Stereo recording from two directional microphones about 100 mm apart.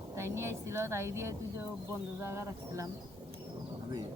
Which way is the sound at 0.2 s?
25° right (ahead or behind).